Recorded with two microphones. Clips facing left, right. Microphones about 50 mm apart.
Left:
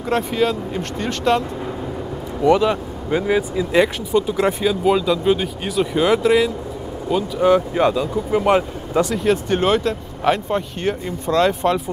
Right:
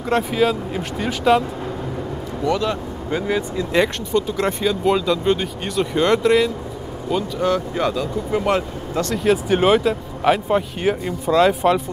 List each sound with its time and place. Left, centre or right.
0.1 s speech: centre
2.4 s speech: centre
7.4 s speech: centre
9.1 s speech: centre